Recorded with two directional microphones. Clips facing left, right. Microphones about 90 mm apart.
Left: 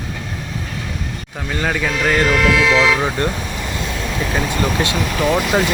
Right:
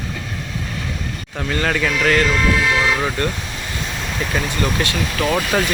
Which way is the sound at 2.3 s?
80° left.